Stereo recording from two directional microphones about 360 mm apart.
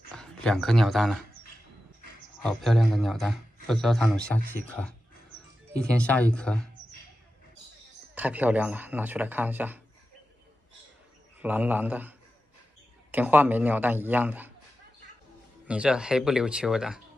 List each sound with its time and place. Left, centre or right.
0.1 s speech: centre
2.4 s a man's voice: centre
8.1 s a man's voice: centre
11.4 s a man's voice: centre
15.6 s a man's voice: centre